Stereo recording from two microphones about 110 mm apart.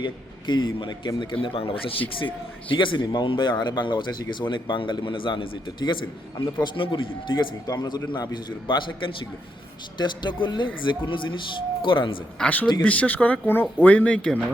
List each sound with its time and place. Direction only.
0.0 s a man's voice: 45° left (ahead or behind)
7.7 s a man's voice: 40° left (ahead or behind)
12.4 s speech: 10° left (ahead or behind)